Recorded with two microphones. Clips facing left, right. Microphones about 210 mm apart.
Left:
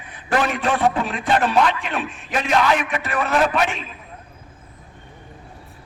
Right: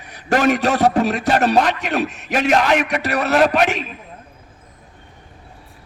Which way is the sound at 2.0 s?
75° right (ahead or behind).